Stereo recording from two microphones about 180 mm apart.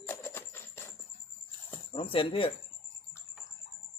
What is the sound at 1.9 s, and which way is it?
Speech, 30° left (ahead or behind).